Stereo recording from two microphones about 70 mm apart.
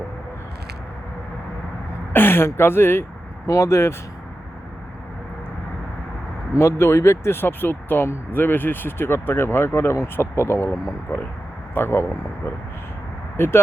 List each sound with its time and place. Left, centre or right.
2.1 s speech: left
6.6 s speech: left
13.3 s speech: left